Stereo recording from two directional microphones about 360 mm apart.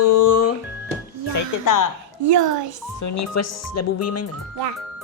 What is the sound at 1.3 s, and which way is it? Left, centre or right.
Speech, left.